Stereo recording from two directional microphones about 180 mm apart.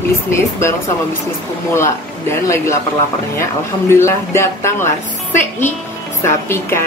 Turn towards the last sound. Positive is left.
turn(degrees=15)  # may be behind; listen again after turning